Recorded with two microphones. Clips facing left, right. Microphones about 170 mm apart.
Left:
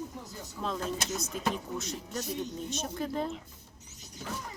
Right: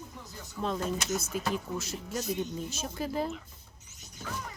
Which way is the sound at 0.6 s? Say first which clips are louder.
Right 2 dB; centre (ahead or behind).